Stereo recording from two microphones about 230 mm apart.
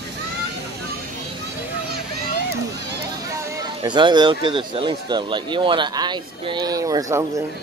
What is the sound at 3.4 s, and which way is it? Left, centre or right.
Speech, centre.